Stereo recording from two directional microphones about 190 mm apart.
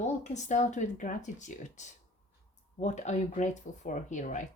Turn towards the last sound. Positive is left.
turn(degrees=40)  # may be behind; listen again after turning